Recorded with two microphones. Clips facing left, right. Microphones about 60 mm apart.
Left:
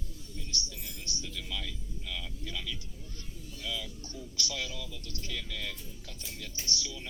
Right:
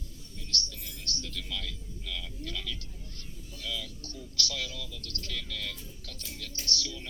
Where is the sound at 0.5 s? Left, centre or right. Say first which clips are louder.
Right 5 dB; centre.